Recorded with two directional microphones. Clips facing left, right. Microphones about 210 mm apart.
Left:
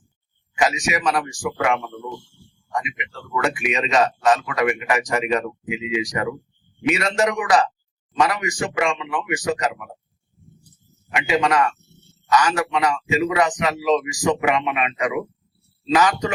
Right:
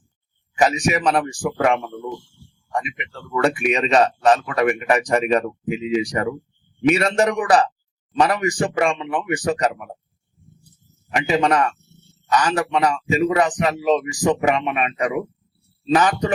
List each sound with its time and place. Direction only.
0.6 s a man's voice: 35° right (ahead or behind)
3.4 s a man's voice: 35° right (ahead or behind)
11.1 s a man's voice: 40° right (ahead or behind)